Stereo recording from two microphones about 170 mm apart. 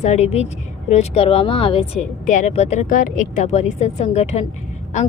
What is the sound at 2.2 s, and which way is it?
Speech, 45° left (ahead or behind).